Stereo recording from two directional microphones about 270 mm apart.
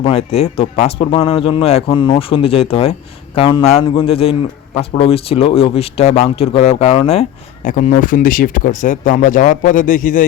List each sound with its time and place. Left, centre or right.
0.0 s speech: left